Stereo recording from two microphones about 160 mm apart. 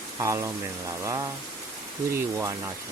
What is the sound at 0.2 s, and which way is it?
Speech, 15° right (ahead or behind).